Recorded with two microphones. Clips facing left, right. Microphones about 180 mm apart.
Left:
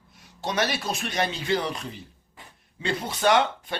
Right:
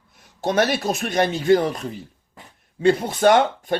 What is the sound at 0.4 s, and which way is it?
A man's voice, 50° right (ahead or behind).